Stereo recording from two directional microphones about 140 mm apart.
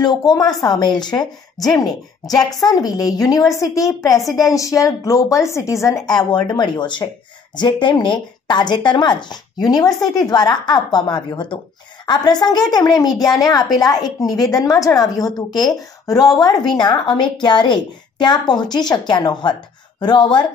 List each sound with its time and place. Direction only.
0.0 s a woman's voice: 30° left (ahead or behind)
2.7 s a woman's voice: 30° left (ahead or behind)